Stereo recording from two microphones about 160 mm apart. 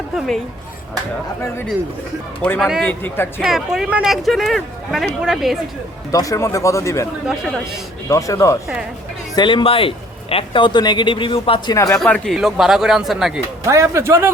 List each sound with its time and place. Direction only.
2.6 s speech: centre (ahead or behind)
2.8 s speech: 15° left (ahead or behind)
3.4 s speech: 5° right (ahead or behind)
6.1 s speech: 20° left (ahead or behind)
11.9 s speech: 5° left (ahead or behind)
13.7 s speech: 15° right (ahead or behind)